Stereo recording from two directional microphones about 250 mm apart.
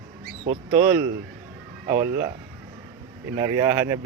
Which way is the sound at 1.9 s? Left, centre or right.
Centre.